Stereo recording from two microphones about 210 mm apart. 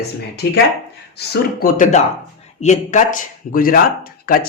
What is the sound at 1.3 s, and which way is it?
Speech, 45° left (ahead or behind).